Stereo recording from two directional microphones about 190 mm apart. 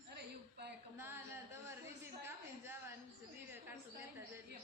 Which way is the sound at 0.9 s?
10° right (ahead or behind).